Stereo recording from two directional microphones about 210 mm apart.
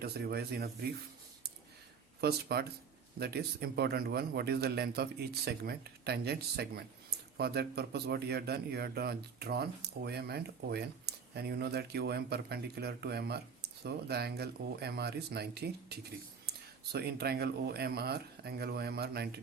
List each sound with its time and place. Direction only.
0.0 s speech: 50° right (ahead or behind)
2.2 s speech: 50° right (ahead or behind)